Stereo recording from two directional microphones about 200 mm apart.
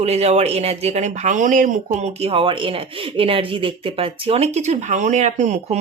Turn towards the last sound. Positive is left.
turn(degrees=-35)  # may be behind; listen again after turning